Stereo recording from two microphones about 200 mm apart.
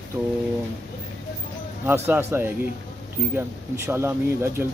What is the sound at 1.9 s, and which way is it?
Speech, 10° right (ahead or behind).